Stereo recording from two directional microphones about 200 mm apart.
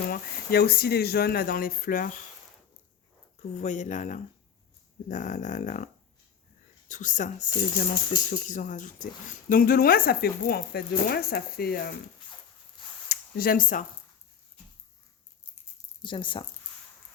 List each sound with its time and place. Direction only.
0.1 s speech: 50° left (ahead or behind)
3.3 s speech: 35° left (ahead or behind)
13.1 s speech: 50° left (ahead or behind)
16.0 s speech: 25° left (ahead or behind)